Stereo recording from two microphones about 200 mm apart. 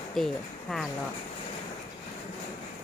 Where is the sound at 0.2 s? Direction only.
Centre (ahead or behind).